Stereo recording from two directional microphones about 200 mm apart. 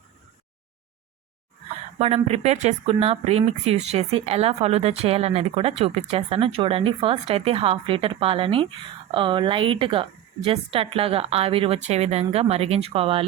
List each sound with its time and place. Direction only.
2.0 s speech: 30° right (ahead or behind)